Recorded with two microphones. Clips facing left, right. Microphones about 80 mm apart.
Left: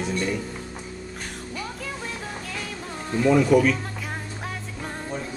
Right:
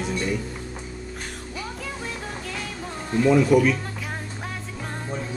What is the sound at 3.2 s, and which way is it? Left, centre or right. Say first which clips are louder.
Speech: even; centre.